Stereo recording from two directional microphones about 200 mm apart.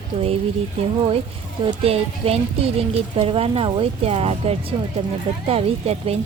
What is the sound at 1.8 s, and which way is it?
Speech, 30° right (ahead or behind).